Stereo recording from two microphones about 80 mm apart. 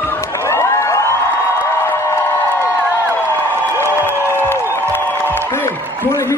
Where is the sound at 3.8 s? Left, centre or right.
Left.